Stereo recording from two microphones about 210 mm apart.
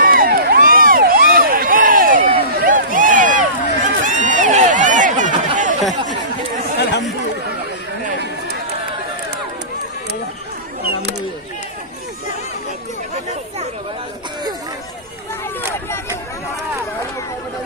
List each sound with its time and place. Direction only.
0.0 s crowd: 40° right (ahead or behind)
2.6 s a sound: 40° right (ahead or behind)
6.8 s chatter: 55° left (ahead or behind)